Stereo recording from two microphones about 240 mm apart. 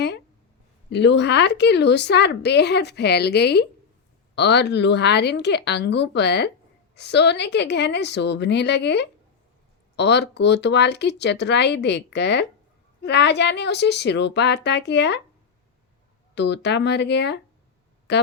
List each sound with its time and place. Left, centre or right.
0.9 s a woman's voice: left
16.3 s a woman's voice: left